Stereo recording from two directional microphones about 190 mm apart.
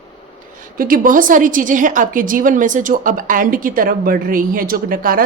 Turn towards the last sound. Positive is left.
turn(degrees=-50)  # may be behind; listen again after turning